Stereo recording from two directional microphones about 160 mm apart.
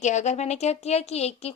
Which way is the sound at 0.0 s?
45° left (ahead or behind).